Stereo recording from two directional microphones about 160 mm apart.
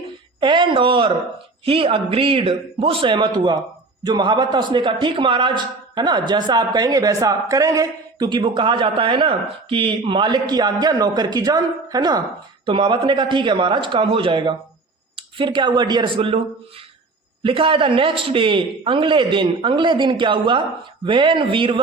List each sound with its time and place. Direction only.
0.3 s a man's voice: 30° right (ahead or behind)
17.4 s a man's voice: 35° right (ahead or behind)